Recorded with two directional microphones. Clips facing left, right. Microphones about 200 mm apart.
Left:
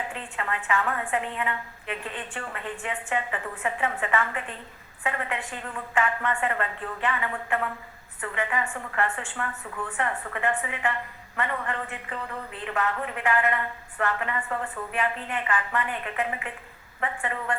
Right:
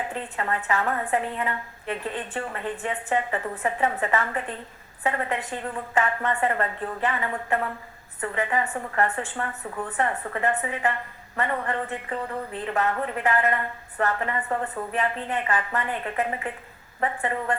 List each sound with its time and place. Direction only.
0.1 s a woman's voice: 40° right (ahead or behind)